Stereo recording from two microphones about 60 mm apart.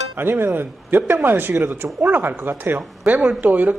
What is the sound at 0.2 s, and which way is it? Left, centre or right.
Speech, right.